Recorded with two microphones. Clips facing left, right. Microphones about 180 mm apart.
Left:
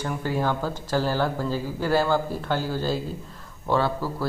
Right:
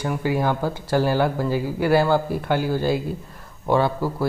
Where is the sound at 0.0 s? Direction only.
10° right (ahead or behind).